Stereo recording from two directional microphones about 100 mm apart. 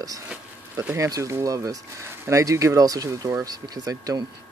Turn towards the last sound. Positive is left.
turn(degrees=-40)  # may be behind; listen again after turning